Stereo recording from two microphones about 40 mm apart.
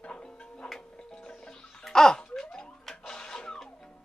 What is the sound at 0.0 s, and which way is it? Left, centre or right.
Tick-tock, left.